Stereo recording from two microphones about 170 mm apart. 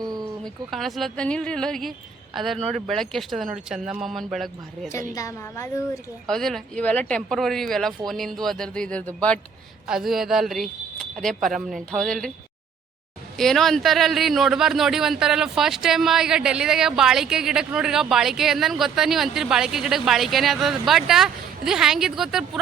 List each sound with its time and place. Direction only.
0.0 s a sound: 20° right (ahead or behind)
0.4 s speech: centre (ahead or behind)
5.1 s a woman's voice: 20° left (ahead or behind)
6.2 s speech: centre (ahead or behind)
13.3 s speech: centre (ahead or behind)